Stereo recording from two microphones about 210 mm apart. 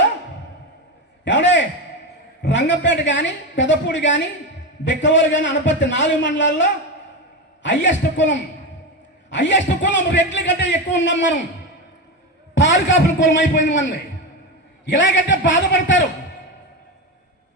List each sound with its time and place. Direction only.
1.2 s a sound: 60° left (ahead or behind)
2.4 s a man's voice: 60° left (ahead or behind)
12.5 s a man's voice: 60° left (ahead or behind)
15.1 s a man's voice: 60° left (ahead or behind)